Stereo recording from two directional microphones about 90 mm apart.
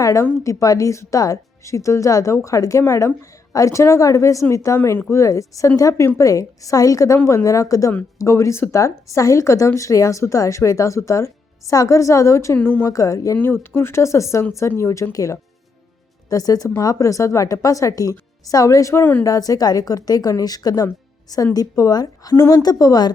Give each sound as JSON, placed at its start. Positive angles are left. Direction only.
{"t": 0.0, "sound": "a woman's voice", "side_deg": 35}
{"t": 12.5, "sound": "speech", "side_deg": 20}
{"t": 12.9, "sound": "speech", "side_deg": 40}
{"t": 13.3, "sound": "speech", "side_deg": 25}
{"t": 19.2, "sound": "speech", "side_deg": 40}